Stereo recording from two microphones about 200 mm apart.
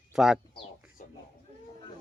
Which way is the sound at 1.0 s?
45° left (ahead or behind).